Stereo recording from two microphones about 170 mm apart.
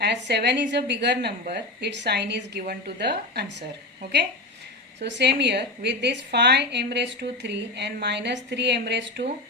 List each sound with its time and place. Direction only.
0.0 s a woman's voice: 80° right
5.0 s a woman's voice: 85° right